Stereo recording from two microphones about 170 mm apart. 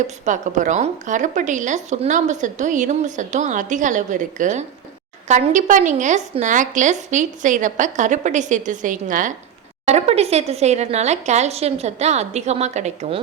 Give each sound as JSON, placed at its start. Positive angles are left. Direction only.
{"t": 0.3, "sound": "a woman's voice", "side_deg": -45}
{"t": 9.8, "sound": "speech", "side_deg": -40}